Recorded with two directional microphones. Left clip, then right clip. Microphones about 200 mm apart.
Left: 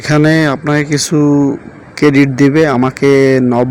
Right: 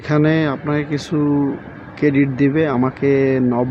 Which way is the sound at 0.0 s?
30° left (ahead or behind).